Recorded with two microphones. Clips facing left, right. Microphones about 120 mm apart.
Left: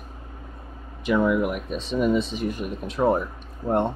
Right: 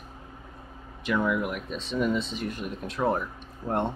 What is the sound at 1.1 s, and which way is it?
Speech, 15° left (ahead or behind).